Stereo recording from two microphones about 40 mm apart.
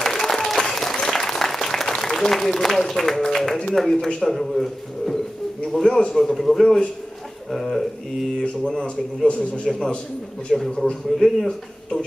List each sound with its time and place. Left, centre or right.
0.0 s applause: centre
3.7 s a man's voice: centre
8.8 s a man's voice: left
9.7 s a man's voice: centre
11.2 s a man's voice: left